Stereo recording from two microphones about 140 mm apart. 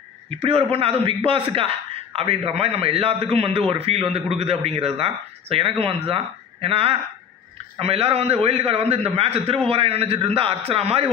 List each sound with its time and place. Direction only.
0.3 s a man's voice: 45° right (ahead or behind)